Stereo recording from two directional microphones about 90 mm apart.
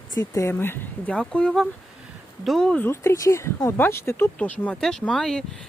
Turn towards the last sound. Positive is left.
turn(degrees=5)  # may be behind; listen again after turning